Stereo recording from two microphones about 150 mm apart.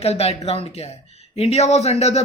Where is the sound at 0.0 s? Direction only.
45° left (ahead or behind).